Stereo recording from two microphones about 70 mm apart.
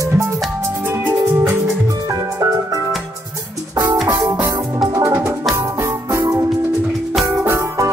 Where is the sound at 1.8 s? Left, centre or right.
Right.